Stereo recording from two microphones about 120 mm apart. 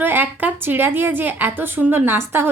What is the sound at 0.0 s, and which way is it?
A woman's voice, 15° right (ahead or behind).